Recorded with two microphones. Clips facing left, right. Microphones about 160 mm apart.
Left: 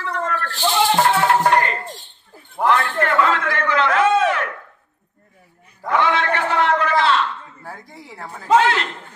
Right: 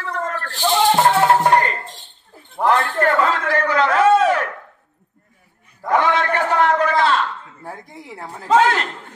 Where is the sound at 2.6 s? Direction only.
40° right (ahead or behind).